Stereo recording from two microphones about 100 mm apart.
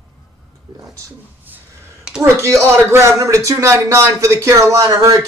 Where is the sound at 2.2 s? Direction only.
25° right (ahead or behind).